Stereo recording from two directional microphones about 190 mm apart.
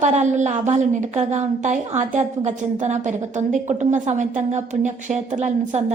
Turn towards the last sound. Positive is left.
turn(degrees=-40)  # may be behind; listen again after turning